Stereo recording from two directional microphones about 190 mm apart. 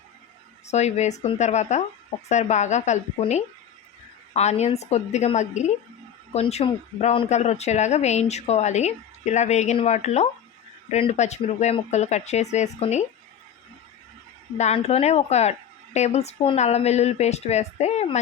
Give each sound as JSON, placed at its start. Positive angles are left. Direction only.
{"t": 0.7, "sound": "speech", "side_deg": 35}
{"t": 14.6, "sound": "speech", "side_deg": 35}